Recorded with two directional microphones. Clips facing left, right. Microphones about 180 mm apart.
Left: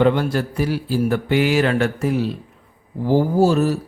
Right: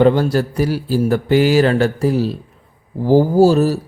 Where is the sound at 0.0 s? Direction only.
35° right (ahead or behind).